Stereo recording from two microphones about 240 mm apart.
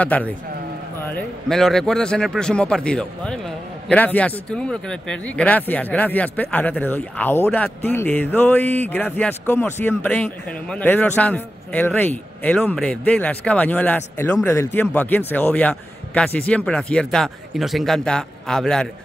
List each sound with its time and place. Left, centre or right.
0.0 s a man's voice: centre